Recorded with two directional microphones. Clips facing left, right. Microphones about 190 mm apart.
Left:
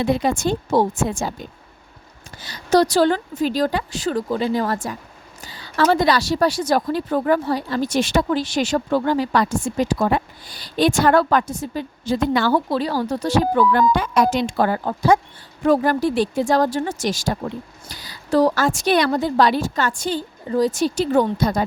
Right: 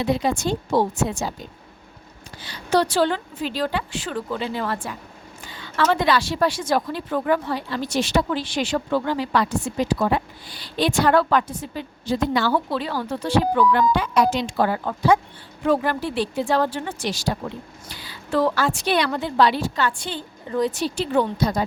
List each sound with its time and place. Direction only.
0.0 s a woman's voice: 50° left (ahead or behind)
2.4 s a woman's voice: 40° left (ahead or behind)
12.7 s a woman's voice: 40° left (ahead or behind)